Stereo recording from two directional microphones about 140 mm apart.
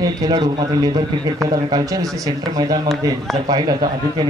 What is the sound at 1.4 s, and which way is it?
Speech, 25° right (ahead or behind).